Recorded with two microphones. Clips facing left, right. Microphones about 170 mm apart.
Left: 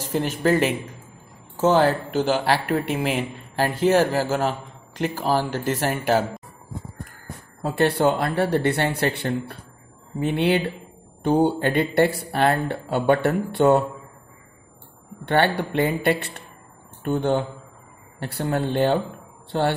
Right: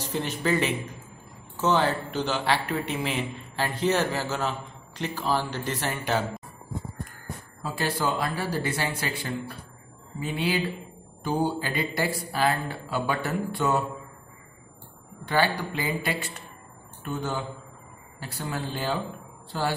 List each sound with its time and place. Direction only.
0.3 s speech: 45° left (ahead or behind)
1.6 s speech: 45° left (ahead or behind)
7.6 s speech: 65° left (ahead or behind)
15.2 s speech: 60° left (ahead or behind)